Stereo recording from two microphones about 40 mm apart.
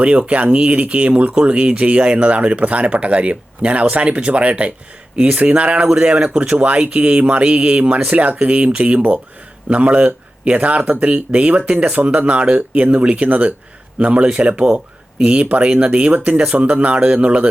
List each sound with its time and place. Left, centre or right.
0.0 s speech: right